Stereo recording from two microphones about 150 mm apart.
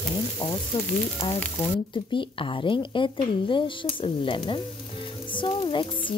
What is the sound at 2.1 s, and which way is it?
Frying, 35° left (ahead or behind).